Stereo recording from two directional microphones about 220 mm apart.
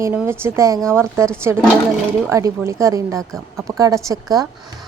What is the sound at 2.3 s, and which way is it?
Speech, 15° right (ahead or behind).